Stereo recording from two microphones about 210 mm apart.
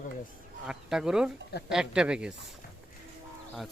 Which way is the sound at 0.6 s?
5° right (ahead or behind).